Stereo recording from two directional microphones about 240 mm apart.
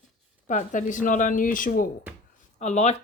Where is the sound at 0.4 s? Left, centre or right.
Left.